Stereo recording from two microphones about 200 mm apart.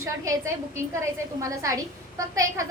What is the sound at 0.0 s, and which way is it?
A woman's voice, 15° right (ahead or behind).